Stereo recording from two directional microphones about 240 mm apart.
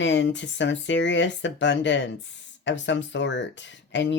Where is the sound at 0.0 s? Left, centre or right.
Left.